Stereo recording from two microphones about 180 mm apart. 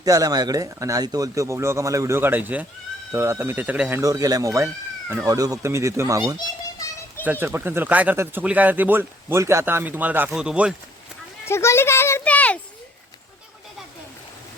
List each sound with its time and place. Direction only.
0.0 s speech: 20° right (ahead or behind)
11.4 s a child's voice: 15° left (ahead or behind)